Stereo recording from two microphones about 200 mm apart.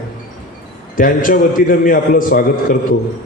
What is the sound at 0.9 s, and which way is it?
A man's voice, 45° left (ahead or behind).